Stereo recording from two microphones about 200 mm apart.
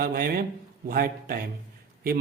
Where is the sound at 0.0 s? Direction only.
50° right (ahead or behind).